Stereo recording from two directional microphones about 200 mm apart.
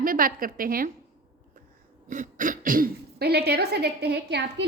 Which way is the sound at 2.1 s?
40° right (ahead or behind).